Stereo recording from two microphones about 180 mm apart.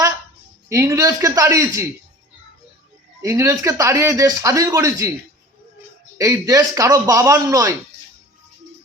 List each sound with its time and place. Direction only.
0.7 s speech: 15° right (ahead or behind)
3.2 s speech: 15° right (ahead or behind)
6.1 s speech: 20° right (ahead or behind)